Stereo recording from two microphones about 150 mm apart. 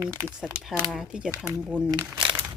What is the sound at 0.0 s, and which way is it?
Speech, 20° right (ahead or behind).